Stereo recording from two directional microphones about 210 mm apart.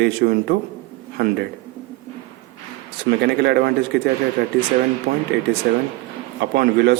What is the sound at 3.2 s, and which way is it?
Speech, 50° right (ahead or behind).